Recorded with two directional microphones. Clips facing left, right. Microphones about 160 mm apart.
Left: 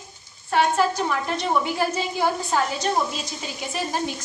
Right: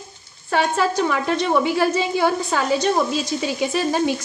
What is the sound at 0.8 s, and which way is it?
A woman's voice, 85° right.